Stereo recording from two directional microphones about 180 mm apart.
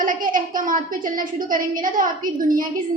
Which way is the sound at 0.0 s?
50° right (ahead or behind).